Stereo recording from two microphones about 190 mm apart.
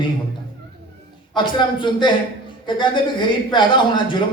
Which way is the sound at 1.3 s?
25° left (ahead or behind).